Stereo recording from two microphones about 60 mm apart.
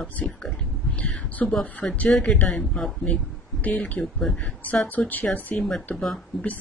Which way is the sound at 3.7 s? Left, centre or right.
Left.